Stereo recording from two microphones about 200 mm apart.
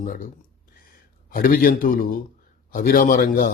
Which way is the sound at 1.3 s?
45° left (ahead or behind).